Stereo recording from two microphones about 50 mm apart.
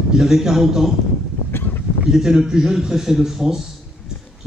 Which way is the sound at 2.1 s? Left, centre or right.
Centre.